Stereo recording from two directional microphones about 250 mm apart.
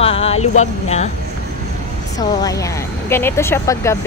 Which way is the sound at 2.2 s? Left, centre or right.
Centre.